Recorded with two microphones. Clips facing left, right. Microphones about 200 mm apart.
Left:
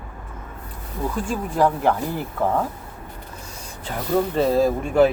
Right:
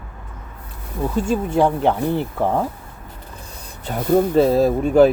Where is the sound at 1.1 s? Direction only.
25° right (ahead or behind).